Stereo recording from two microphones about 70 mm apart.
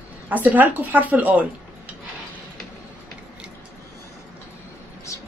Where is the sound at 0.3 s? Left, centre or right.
Right.